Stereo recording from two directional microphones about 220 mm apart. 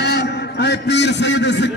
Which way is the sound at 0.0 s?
50° left (ahead or behind).